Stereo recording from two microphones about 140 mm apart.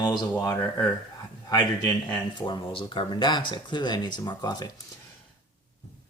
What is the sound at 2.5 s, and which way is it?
Speech, 35° left (ahead or behind).